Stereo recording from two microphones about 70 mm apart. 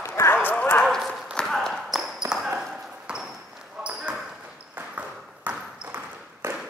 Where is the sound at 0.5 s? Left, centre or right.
Left.